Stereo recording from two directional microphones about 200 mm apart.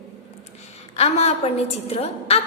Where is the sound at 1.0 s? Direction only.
30° left (ahead or behind).